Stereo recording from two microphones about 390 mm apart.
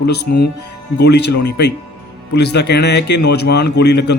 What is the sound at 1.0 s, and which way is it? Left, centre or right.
Speech, left.